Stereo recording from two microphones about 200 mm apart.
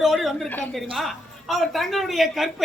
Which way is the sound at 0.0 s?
Centre (ahead or behind).